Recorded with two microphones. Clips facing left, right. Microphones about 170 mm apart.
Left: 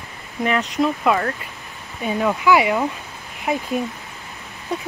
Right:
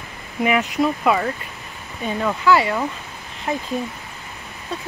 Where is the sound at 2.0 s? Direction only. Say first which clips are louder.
Left 1 dB; 10° left (ahead or behind).